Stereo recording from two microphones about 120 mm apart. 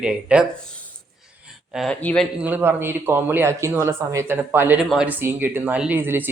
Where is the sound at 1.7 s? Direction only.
Centre (ahead or behind).